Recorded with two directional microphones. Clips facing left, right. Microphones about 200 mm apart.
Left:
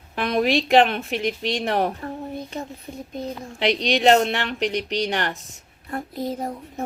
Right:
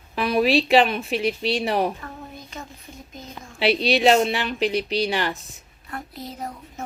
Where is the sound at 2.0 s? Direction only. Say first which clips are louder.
Left 8 dB; 30° left (ahead or behind).